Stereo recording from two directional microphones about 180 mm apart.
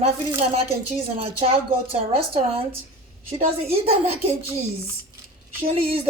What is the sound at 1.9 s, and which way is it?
Speech, 30° right (ahead or behind).